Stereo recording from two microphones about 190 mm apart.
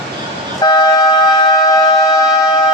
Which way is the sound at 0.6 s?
20° left (ahead or behind).